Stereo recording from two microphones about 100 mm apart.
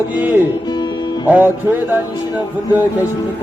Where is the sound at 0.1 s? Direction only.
15° right (ahead or behind).